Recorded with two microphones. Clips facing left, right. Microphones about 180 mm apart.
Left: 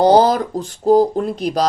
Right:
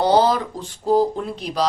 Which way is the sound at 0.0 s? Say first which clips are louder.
Left 5 dB; 45° left (ahead or behind).